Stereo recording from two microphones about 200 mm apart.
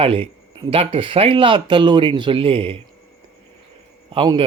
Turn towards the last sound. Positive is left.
turn(degrees=-25)  # may be behind; listen again after turning